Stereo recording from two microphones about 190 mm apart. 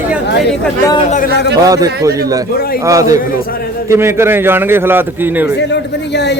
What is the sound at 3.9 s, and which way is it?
A man's voice, 15° right (ahead or behind).